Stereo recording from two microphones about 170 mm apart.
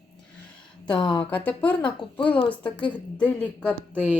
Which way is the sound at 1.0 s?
30° left (ahead or behind).